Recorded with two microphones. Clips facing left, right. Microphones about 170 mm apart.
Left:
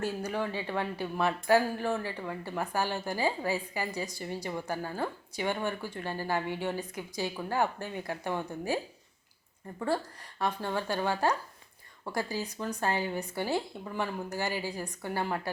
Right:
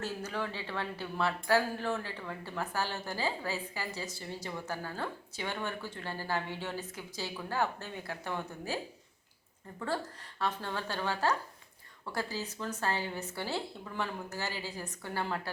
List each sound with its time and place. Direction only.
0.0 s speech: 15° left (ahead or behind)
9.8 s speech: 15° left (ahead or behind)